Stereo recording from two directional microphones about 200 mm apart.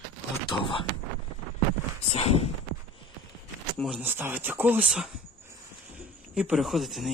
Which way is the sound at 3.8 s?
5° right (ahead or behind).